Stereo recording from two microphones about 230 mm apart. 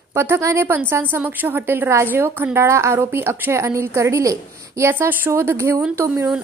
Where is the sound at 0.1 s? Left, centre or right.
Centre.